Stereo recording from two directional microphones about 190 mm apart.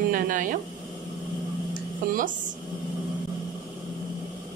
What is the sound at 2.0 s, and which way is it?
Speech, 50° right (ahead or behind).